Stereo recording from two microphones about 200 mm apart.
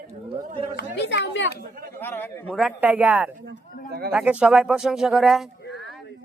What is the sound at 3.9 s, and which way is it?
Speech, 50° right (ahead or behind).